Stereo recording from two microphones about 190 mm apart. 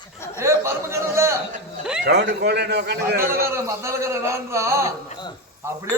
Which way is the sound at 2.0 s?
65° right (ahead or behind).